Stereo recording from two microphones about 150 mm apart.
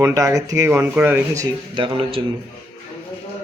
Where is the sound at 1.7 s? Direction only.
35° right (ahead or behind).